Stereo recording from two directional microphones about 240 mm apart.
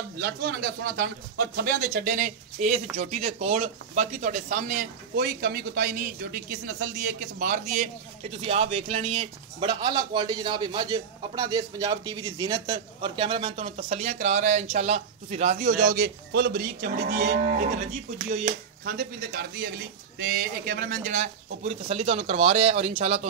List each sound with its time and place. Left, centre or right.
0.2 s moo: right
1.6 s speech: right
15.8 s moo: right
18.9 s moo: right
20.2 s speech: right